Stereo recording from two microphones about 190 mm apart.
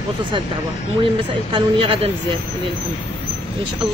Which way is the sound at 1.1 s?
30° right (ahead or behind).